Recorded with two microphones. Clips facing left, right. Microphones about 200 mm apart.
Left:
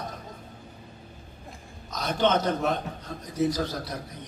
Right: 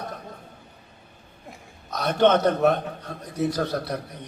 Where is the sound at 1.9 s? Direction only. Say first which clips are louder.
Right 5 dB; 65° right (ahead or behind).